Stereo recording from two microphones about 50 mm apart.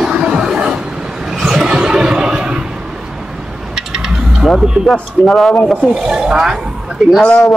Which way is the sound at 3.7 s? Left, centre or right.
Centre.